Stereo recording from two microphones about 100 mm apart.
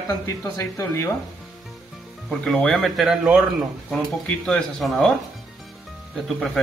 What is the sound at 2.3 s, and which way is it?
Speech, 10° left (ahead or behind).